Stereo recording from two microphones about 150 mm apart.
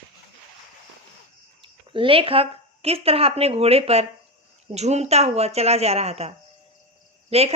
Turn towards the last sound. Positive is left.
turn(degrees=-45)  # may be behind; listen again after turning